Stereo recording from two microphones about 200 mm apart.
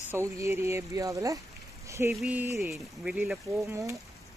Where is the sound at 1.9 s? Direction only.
15° right (ahead or behind).